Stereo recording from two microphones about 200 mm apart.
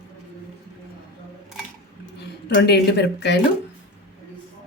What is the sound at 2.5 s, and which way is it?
Speech, 55° left (ahead or behind).